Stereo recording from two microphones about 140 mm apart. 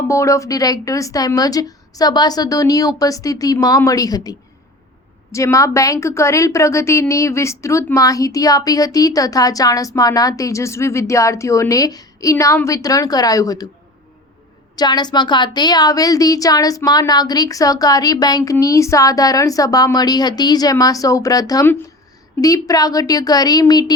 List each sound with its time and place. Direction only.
0.1 s a woman's voice: 20° left (ahead or behind)
14.8 s a woman's voice: 30° left (ahead or behind)